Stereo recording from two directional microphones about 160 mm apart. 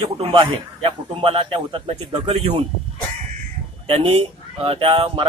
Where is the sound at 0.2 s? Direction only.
30° right (ahead or behind).